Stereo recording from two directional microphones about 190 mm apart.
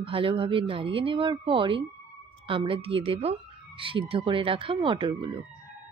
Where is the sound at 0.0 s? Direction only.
30° right (ahead or behind).